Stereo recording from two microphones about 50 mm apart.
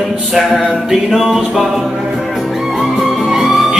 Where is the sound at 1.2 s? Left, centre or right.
Centre.